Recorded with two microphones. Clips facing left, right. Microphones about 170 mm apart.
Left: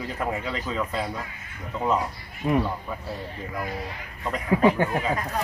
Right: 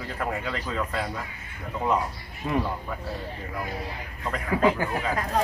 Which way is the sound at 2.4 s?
20° left (ahead or behind).